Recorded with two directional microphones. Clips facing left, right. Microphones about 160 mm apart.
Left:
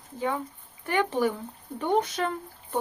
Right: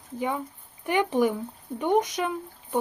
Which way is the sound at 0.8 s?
15° right (ahead or behind).